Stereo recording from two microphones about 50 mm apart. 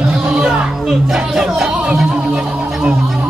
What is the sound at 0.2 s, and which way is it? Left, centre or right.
Music, centre.